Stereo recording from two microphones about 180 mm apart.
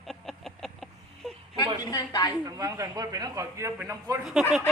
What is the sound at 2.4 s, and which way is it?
A man's voice, 20° right (ahead or behind).